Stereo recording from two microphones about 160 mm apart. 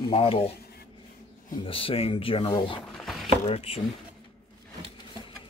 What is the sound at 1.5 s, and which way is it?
Speech, 35° left (ahead or behind).